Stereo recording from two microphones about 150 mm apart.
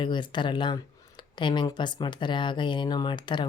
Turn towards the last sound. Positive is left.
turn(degrees=30)  # may be behind; listen again after turning